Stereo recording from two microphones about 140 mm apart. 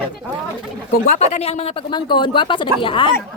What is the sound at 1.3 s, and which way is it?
Speech, 50° left (ahead or behind).